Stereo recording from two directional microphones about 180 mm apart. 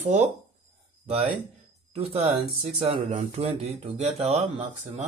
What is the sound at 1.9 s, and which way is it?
Speech, 35° right (ahead or behind).